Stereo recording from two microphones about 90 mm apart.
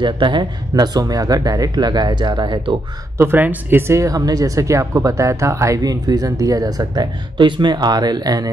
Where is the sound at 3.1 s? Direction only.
20° right (ahead or behind).